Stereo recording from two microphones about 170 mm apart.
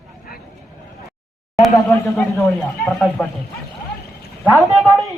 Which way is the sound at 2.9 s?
Centre (ahead or behind).